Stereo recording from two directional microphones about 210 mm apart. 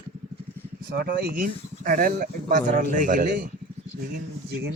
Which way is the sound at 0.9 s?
45° right (ahead or behind).